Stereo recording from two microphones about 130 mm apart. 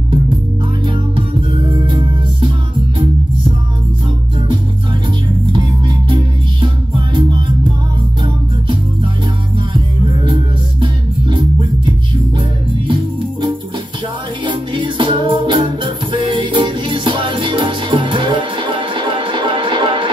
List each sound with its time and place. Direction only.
1.9 s music: 40° right (ahead or behind)
5.5 s music: 40° right (ahead or behind)
10.2 s music: 40° right (ahead or behind)
14.4 s music: 40° right (ahead or behind)